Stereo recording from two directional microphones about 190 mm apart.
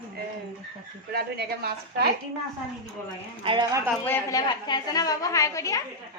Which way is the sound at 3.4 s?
25° right (ahead or behind).